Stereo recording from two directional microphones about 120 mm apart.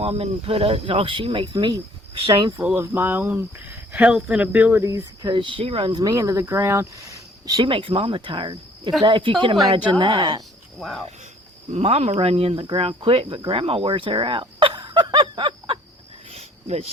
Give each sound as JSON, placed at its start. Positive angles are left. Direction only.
{"t": 0.0, "sound": "speech", "side_deg": -55}
{"t": 2.3, "sound": "speech", "side_deg": -30}
{"t": 2.6, "sound": "speech", "side_deg": -15}
{"t": 4.8, "sound": "speech", "side_deg": -25}
{"t": 5.3, "sound": "speech", "side_deg": -45}
{"t": 5.9, "sound": "speech", "side_deg": -35}
{"t": 6.1, "sound": "speech", "side_deg": -25}
{"t": 7.6, "sound": "speech", "side_deg": -45}
{"t": 10.8, "sound": "speech", "side_deg": 0}
{"t": 11.7, "sound": "speech", "side_deg": -60}
{"t": 13.5, "sound": "a sound", "side_deg": -50}
{"t": 16.3, "sound": "cricket", "side_deg": -60}